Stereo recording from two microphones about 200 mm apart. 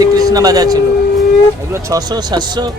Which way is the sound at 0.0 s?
20° right (ahead or behind).